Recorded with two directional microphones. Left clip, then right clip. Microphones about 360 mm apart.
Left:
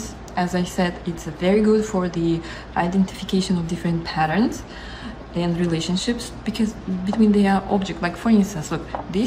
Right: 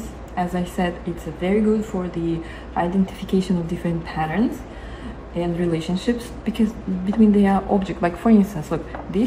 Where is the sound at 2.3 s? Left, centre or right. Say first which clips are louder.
Left 2 dB; centre.